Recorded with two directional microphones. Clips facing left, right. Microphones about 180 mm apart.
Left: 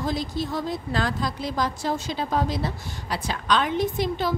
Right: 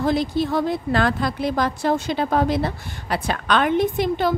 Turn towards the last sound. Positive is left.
turn(degrees=-60)  # may be behind; listen again after turning